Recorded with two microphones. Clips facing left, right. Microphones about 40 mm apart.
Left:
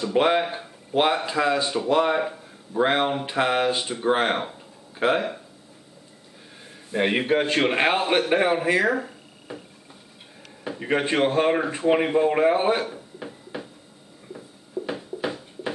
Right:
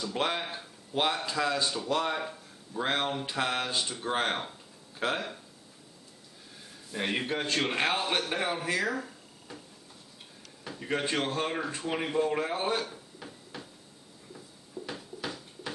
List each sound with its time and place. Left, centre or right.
0.0 s a man's voice: left
6.9 s a man's voice: left
10.6 s speech: left
14.3 s a sound: left